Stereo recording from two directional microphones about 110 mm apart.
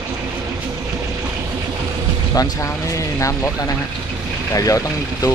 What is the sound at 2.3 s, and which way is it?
Speech, 30° left (ahead or behind).